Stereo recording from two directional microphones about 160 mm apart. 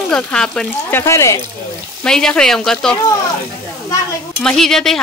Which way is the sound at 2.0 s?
5° left (ahead or behind).